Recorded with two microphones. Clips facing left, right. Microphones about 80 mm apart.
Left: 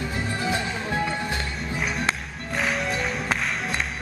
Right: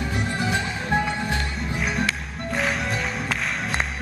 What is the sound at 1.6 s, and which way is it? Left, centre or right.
Music, centre.